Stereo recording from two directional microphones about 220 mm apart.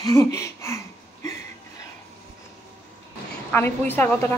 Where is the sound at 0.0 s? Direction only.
15° left (ahead or behind).